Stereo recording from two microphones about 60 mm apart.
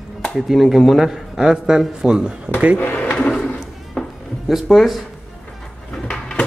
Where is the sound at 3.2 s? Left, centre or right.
Centre.